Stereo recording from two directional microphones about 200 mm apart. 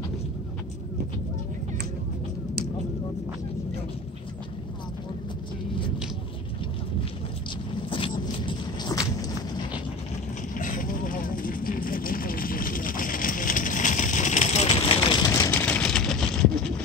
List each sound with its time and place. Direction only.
7.9 s walk: 25° left (ahead or behind)
10.5 s vehicle: 40° left (ahead or behind)
15.3 s vehicle: 15° left (ahead or behind)